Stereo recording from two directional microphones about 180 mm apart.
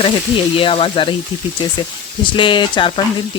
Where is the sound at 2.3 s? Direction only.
25° left (ahead or behind).